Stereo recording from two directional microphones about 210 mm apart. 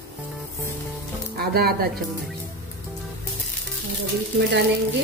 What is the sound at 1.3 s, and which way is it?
Speech, 45° right (ahead or behind).